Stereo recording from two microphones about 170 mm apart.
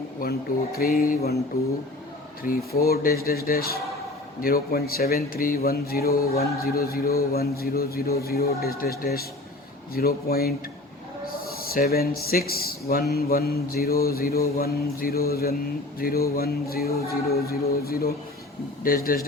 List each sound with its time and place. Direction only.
0.2 s a man's voice: 60° left (ahead or behind)
2.7 s a man's voice: 65° left (ahead or behind)